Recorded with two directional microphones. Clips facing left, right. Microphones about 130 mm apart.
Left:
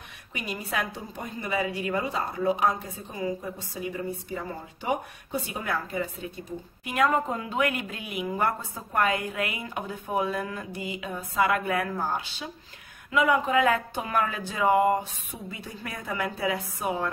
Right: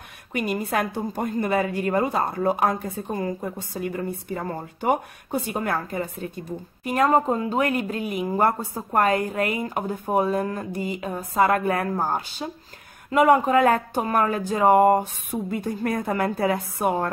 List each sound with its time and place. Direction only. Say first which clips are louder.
0.3 s a woman's voice: right 8 dB; 50° right (ahead or behind)
6.8 s a woman's voice: right 5 dB; 35° right (ahead or behind); by 17.1 s 55° right (ahead or behind)